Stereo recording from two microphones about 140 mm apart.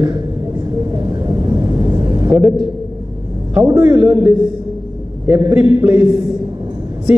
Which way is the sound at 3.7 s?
10° right (ahead or behind).